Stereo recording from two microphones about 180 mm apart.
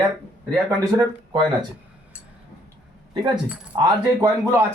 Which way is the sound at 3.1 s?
25° right (ahead or behind).